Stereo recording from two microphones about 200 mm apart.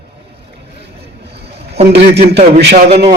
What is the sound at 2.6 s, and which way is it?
Speech, 55° right (ahead or behind).